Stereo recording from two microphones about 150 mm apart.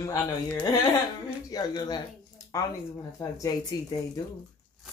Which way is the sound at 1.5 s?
25° left (ahead or behind).